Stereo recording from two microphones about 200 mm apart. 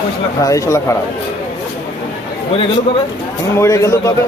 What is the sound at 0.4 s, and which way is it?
Speech, 15° left (ahead or behind).